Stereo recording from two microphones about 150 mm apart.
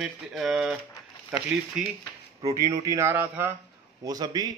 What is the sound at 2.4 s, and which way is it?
A man's voice, 20° right (ahead or behind).